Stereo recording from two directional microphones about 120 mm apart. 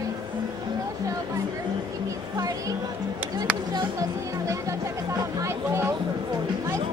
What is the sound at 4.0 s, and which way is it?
Chatter, 25° right (ahead or behind).